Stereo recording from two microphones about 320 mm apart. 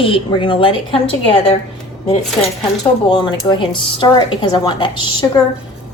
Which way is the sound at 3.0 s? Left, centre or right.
Centre.